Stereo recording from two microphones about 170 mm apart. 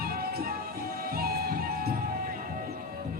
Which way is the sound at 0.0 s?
65° right (ahead or behind).